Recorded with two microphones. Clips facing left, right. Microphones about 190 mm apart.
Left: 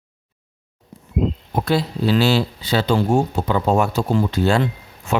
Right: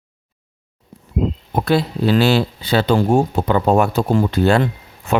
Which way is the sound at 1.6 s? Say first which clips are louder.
Right 3 dB; 60° right (ahead or behind).